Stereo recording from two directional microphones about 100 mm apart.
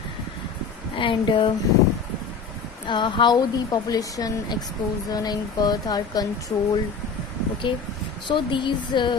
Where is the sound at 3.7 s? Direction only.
35° left (ahead or behind).